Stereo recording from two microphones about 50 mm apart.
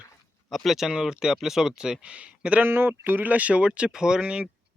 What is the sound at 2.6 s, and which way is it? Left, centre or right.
Speech, right.